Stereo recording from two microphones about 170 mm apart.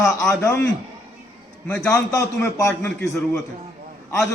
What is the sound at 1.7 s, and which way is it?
Speech, 5° left (ahead or behind).